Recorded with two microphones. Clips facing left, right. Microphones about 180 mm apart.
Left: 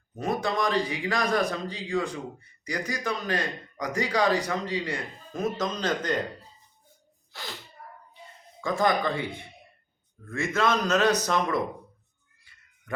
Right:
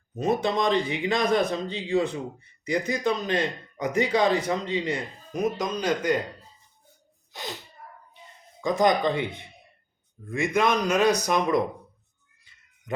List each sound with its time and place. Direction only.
0.2 s speech: 20° right (ahead or behind)
7.3 s speech: 20° right (ahead or behind)
8.6 s speech: 20° right (ahead or behind)